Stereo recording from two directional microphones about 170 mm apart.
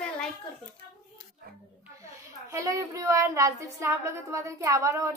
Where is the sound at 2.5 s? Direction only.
20° right (ahead or behind).